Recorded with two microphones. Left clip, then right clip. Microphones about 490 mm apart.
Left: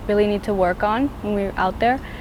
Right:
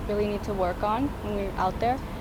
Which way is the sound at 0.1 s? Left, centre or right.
Left.